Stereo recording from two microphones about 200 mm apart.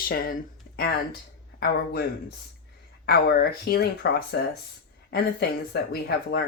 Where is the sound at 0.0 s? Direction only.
45° left (ahead or behind).